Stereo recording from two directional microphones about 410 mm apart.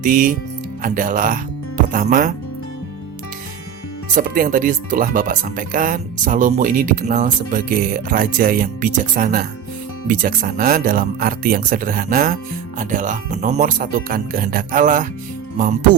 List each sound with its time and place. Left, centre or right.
0.0 s speech: centre
4.1 s speech: centre